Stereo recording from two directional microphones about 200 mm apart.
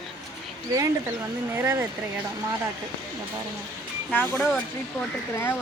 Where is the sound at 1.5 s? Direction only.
10° right (ahead or behind).